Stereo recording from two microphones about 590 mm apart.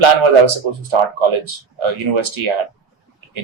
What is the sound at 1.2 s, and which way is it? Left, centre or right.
Speech, right.